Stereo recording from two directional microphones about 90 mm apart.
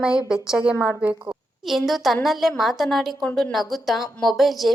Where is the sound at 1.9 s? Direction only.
Centre (ahead or behind).